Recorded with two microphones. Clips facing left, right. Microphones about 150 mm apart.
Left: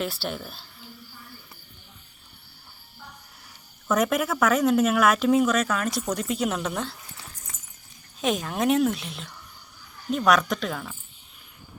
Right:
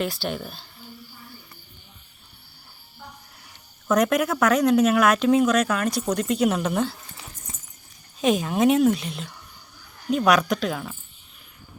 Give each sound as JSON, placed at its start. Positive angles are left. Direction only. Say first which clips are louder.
{"t": 0.0, "sound": "speech", "louder": "right 3 dB", "side_deg": 0}
{"t": 3.8, "sound": "speech", "louder": "right 3 dB", "side_deg": 5}
{"t": 8.2, "sound": "speech", "louder": "right 5 dB", "side_deg": 0}